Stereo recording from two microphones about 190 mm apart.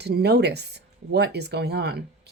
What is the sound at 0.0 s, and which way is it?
Speech, 60° right (ahead or behind).